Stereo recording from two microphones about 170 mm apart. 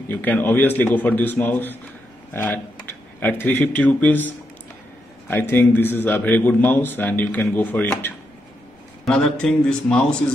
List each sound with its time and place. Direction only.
0.1 s a man's voice: 10° left (ahead or behind)
5.3 s a man's voice: 10° left (ahead or behind)